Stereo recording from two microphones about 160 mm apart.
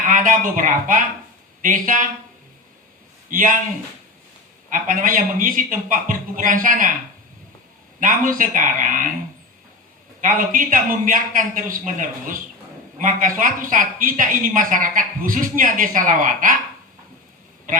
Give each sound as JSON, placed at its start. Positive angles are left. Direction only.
{"t": 0.1, "sound": "a woman's voice", "side_deg": -55}
{"t": 3.2, "sound": "a man's voice", "side_deg": -60}
{"t": 4.7, "sound": "a woman's voice", "side_deg": -60}
{"t": 7.9, "sound": "a woman's voice", "side_deg": -60}
{"t": 10.2, "sound": "a woman's voice", "side_deg": -60}